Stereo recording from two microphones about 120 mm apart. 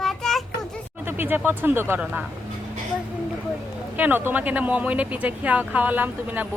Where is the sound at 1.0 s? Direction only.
15° right (ahead or behind).